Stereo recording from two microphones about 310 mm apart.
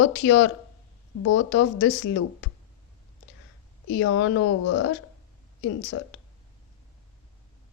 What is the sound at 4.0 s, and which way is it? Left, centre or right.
Speech, left.